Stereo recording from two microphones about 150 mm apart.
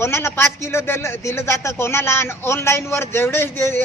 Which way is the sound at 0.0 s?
15° left (ahead or behind).